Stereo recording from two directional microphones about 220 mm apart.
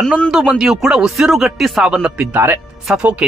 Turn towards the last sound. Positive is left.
turn(degrees=-5)  # may be behind; listen again after turning